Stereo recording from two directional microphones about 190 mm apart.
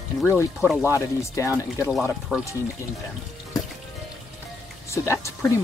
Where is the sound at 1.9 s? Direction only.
Centre (ahead or behind).